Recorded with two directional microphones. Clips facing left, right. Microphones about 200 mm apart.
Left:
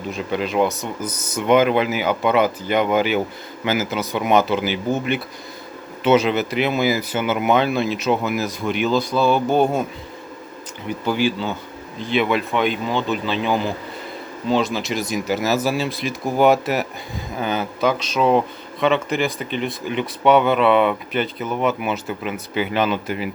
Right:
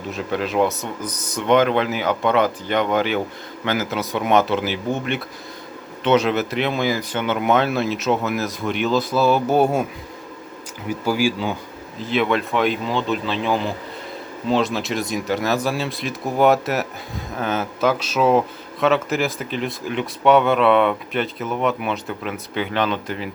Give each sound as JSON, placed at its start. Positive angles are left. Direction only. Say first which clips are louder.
{"t": 0.1, "sound": "speech", "louder": "even", "side_deg": 0}
{"t": 10.8, "sound": "speech", "louder": "even", "side_deg": -5}